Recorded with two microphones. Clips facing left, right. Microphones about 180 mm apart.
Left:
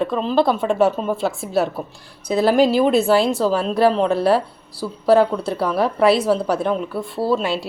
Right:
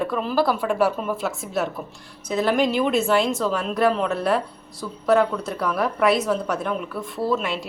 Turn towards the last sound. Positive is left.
turn(degrees=30)  # may be behind; listen again after turning